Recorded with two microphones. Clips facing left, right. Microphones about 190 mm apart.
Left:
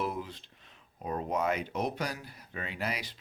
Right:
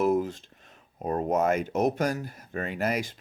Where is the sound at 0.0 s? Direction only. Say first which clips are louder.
Right 11 dB; 45° right (ahead or behind).